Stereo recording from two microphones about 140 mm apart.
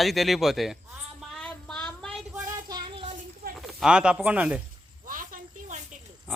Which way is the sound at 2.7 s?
35° right (ahead or behind).